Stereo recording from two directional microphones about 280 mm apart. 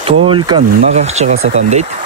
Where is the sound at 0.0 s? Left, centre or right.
Centre.